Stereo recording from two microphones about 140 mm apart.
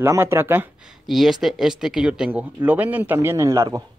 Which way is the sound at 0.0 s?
15° right (ahead or behind).